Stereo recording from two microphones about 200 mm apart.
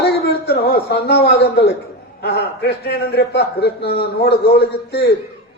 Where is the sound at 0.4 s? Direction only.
50° left (ahead or behind).